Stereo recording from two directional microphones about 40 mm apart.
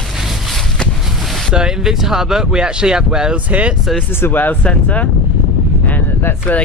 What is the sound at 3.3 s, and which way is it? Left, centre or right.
Speech, right.